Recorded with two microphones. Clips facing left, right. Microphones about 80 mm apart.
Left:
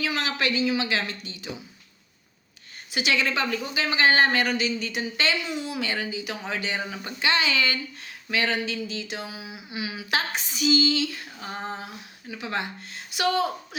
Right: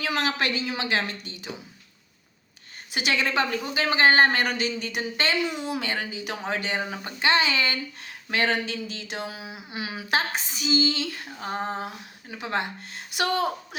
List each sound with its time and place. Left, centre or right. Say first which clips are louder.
0.0 s speech: right 1 dB; right
2.9 s speech: even; right
8.3 s speech: right 1 dB; right